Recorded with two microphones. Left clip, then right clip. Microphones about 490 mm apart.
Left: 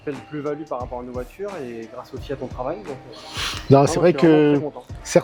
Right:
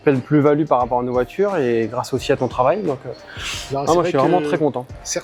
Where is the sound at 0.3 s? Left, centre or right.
Right.